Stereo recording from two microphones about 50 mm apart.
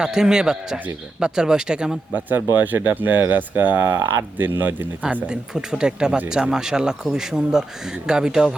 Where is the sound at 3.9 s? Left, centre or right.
Right.